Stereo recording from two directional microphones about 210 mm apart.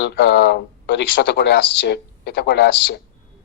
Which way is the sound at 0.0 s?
50° left (ahead or behind).